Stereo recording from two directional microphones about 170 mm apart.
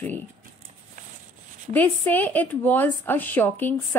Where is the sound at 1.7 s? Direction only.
10° left (ahead or behind).